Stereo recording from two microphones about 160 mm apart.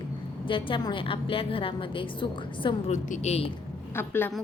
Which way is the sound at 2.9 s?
45° left (ahead or behind).